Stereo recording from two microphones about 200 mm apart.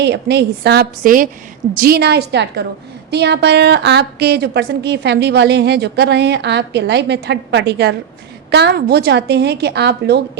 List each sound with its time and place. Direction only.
0.0 s a woman's voice: 60° right (ahead or behind)